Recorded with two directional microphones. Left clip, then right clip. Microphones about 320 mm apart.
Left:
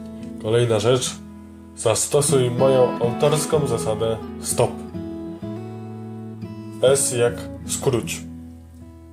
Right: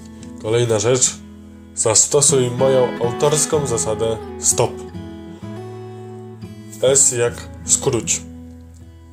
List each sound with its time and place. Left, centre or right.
0.4 s speech: centre
6.8 s speech: centre